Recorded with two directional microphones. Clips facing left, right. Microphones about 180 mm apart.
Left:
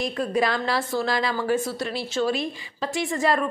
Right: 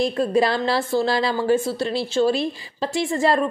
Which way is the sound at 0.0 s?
30° right (ahead or behind).